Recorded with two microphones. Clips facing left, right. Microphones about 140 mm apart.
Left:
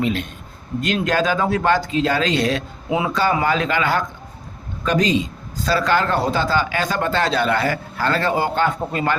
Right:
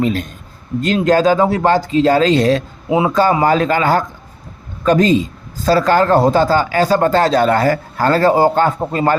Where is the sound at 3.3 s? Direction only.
40° right (ahead or behind).